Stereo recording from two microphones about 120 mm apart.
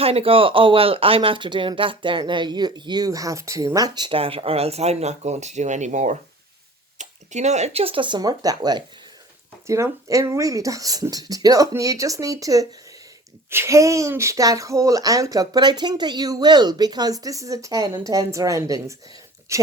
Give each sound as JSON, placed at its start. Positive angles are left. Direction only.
{"t": 0.0, "sound": "speech", "side_deg": -55}
{"t": 4.1, "sound": "speech", "side_deg": -50}
{"t": 7.0, "sound": "speech", "side_deg": -75}